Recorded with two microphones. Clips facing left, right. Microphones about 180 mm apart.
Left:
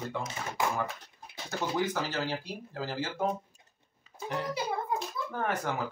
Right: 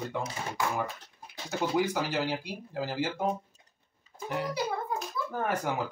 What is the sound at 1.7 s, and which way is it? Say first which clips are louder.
Speech: right 2 dB; 10° right (ahead or behind).